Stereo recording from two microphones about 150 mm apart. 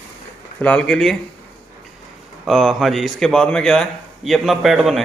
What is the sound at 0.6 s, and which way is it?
Speech, 5° left (ahead or behind).